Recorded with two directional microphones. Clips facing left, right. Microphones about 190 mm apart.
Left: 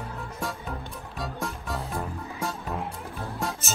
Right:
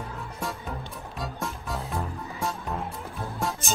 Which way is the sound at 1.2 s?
Centre (ahead or behind).